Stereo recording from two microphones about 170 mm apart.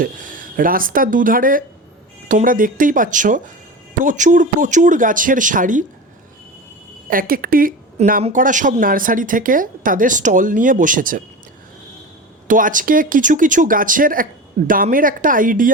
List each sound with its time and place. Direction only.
0.0 s speech: 50° right (ahead or behind)
7.1 s a woman's voice: 55° right (ahead or behind)
12.5 s speech: 50° right (ahead or behind)